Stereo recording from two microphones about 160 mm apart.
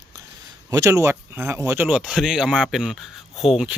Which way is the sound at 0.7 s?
20° right (ahead or behind).